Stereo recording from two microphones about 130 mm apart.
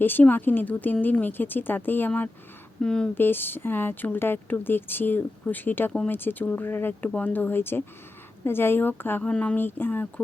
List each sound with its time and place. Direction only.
0.0 s speech: 15° left (ahead or behind)